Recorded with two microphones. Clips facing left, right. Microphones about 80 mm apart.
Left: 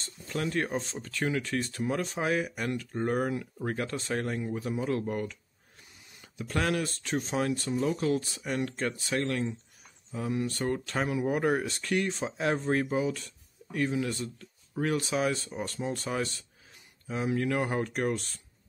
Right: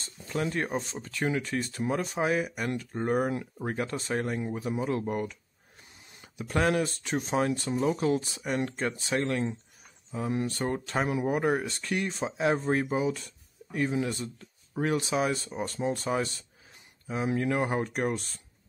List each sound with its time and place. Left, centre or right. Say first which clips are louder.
0.0 s speech: right 2 dB; centre
3.6 s speech: right 1 dB; centre
10.4 s speech: even; right
11.2 s speech: even; centre
17.4 s speech: right 2 dB; centre